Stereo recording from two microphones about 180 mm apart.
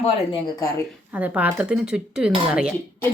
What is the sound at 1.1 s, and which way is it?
Speech, 10° right (ahead or behind).